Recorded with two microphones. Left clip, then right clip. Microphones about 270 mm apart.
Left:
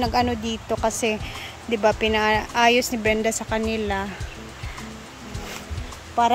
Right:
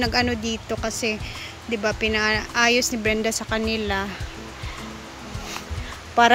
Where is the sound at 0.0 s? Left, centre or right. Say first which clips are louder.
Even; centre.